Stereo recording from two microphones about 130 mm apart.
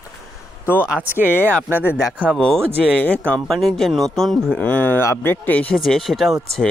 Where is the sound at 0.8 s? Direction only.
10° right (ahead or behind).